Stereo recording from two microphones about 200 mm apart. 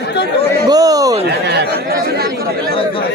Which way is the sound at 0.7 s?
20° right (ahead or behind).